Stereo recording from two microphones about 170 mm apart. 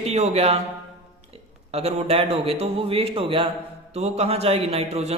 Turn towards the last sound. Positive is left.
turn(degrees=-40)  # may be behind; listen again after turning